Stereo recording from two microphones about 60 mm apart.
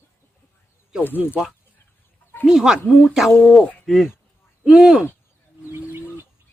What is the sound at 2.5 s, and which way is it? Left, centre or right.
Speech, centre.